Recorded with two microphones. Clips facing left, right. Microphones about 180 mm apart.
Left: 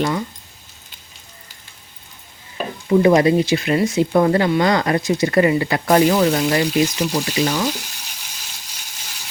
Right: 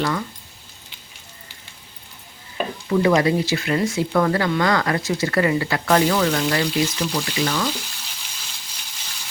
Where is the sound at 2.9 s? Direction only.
25° left (ahead or behind).